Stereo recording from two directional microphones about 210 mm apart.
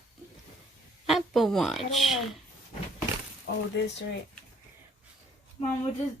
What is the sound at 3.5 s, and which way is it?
Speech, 50° left (ahead or behind).